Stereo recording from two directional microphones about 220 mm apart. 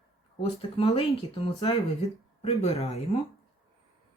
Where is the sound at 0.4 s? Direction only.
25° left (ahead or behind).